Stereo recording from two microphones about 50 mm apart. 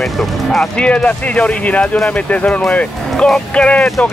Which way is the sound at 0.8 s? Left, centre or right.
Left.